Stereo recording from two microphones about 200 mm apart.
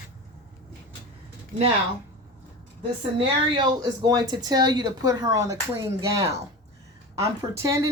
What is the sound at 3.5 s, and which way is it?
Speech, 20° right (ahead or behind).